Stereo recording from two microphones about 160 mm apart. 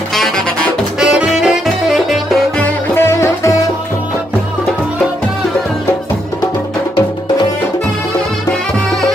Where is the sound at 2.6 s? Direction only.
15° left (ahead or behind).